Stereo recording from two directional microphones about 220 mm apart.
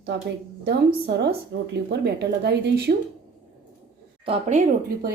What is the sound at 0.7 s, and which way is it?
A woman's voice, 45° right (ahead or behind).